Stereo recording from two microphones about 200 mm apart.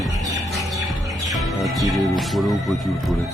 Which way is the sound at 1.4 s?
Centre (ahead or behind).